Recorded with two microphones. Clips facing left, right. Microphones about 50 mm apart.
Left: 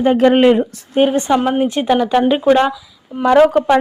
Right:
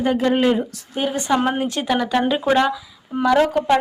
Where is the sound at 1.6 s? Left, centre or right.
Left.